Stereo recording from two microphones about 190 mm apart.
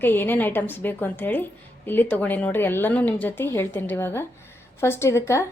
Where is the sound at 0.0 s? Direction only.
10° left (ahead or behind).